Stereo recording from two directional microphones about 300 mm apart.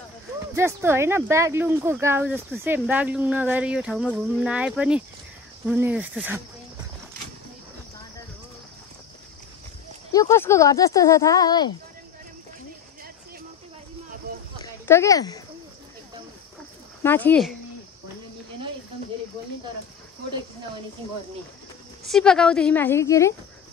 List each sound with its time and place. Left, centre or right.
0.6 s speech: centre
10.1 s speech: centre
14.3 s a sound: right
14.6 s speech: centre
17.0 s speech: centre
22.0 s speech: centre